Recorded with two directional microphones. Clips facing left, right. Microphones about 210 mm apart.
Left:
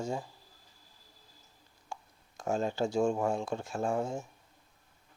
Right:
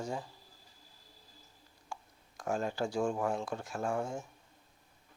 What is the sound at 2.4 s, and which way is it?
Speech, 25° left (ahead or behind).